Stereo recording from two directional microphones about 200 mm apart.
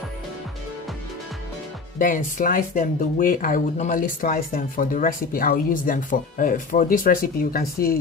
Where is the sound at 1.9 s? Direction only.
40° left (ahead or behind).